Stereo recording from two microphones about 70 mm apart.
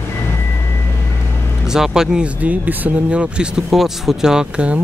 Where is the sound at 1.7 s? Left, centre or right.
Centre.